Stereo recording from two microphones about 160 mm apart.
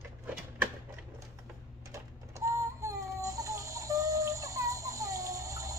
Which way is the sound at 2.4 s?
20° right (ahead or behind).